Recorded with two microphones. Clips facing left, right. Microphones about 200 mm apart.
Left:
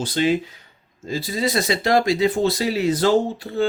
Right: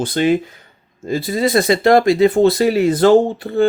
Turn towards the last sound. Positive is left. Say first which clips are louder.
# right 7 dB
turn(degrees=-55)  # may be behind; listen again after turning